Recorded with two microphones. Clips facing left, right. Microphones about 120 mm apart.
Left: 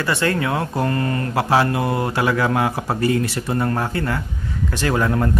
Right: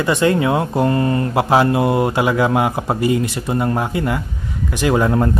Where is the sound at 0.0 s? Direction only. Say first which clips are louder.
Right 5 dB; 20° right (ahead or behind).